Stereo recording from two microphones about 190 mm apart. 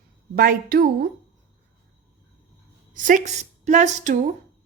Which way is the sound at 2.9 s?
45° right (ahead or behind).